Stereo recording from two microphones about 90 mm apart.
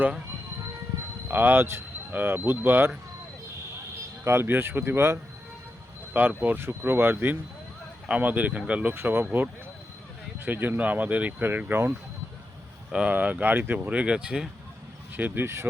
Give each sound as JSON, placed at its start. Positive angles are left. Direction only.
{"t": 1.3, "sound": "speech", "side_deg": -25}
{"t": 4.2, "sound": "speech", "side_deg": -30}
{"t": 10.4, "sound": "speech", "side_deg": -20}
{"t": 15.1, "sound": "speech", "side_deg": -20}